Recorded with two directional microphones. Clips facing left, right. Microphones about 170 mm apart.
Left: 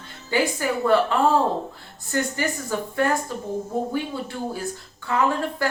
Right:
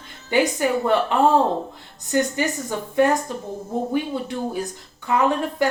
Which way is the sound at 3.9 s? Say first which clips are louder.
Right 4 dB; 20° right (ahead or behind).